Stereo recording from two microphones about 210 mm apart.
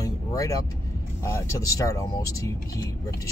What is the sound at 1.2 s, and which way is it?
Speech, 15° left (ahead or behind).